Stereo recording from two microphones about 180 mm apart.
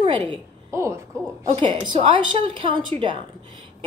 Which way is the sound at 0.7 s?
15° right (ahead or behind).